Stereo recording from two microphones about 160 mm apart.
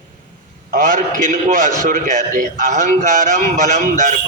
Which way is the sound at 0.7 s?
50° right (ahead or behind).